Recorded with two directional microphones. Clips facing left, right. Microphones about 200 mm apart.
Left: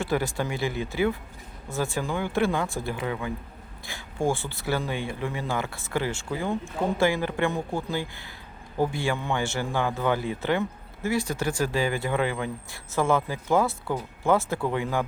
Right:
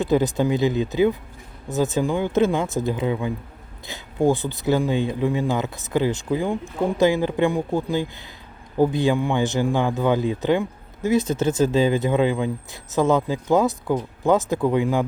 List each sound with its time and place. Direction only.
0.0 s speech: 20° right (ahead or behind)